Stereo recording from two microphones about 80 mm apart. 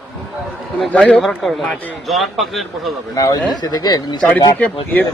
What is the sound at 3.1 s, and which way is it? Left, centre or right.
Speech, left.